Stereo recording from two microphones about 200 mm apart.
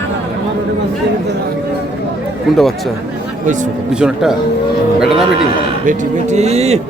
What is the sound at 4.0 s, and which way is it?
A man's voice, 5° right (ahead or behind).